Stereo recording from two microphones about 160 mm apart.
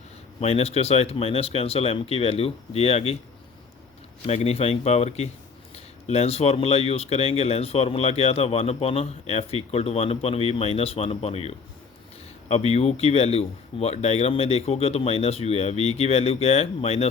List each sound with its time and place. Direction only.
0.3 s speech: 40° left (ahead or behind)
4.3 s speech: 40° left (ahead or behind)